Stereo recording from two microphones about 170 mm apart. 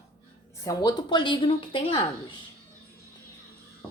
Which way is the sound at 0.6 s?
25° left (ahead or behind).